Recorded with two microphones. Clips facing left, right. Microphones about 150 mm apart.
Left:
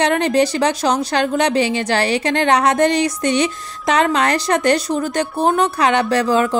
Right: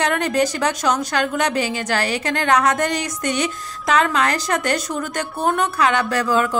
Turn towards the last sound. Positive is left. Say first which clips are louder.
# left 3 dB
turn(degrees=30)  # may be behind; listen again after turning